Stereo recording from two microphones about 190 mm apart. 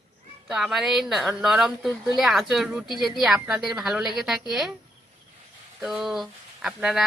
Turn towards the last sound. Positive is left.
turn(degrees=0)  # may be behind; listen again after turning